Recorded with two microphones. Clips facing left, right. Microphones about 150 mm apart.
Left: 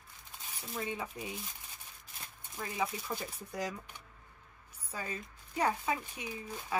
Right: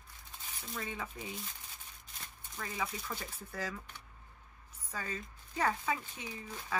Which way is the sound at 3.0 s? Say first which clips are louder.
Left 3 dB; 10° left (ahead or behind).